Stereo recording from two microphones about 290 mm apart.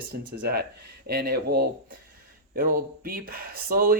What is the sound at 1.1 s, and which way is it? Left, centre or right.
Speech, right.